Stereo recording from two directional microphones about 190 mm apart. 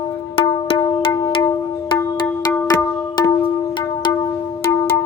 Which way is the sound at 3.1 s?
20° left (ahead or behind).